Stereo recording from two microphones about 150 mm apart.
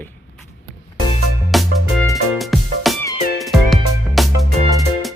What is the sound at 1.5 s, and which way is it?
Music, centre (ahead or behind).